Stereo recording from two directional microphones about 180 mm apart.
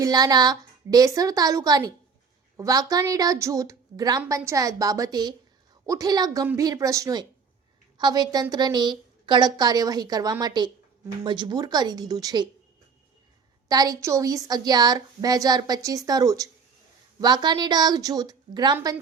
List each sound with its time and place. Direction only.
0.0 s a woman's voice: 20° right (ahead or behind)
13.7 s a woman's voice: 20° right (ahead or behind)